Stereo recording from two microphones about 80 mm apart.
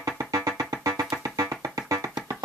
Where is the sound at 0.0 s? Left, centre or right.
Right.